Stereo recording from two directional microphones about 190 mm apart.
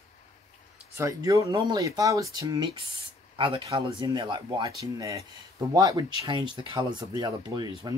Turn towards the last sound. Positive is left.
turn(degrees=-20)  # may be behind; listen again after turning